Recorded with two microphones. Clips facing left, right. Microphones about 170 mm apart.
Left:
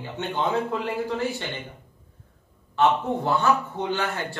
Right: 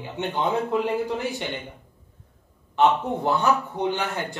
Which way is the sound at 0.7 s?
15° right (ahead or behind).